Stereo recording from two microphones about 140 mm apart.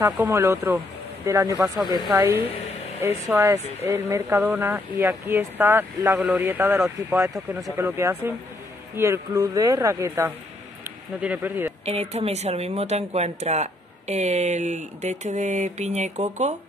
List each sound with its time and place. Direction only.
0.0 s speech: 20° right (ahead or behind)
6.1 s a man's voice: 5° right (ahead or behind)
6.4 s speech: 15° right (ahead or behind)
11.8 s speech: 50° right (ahead or behind)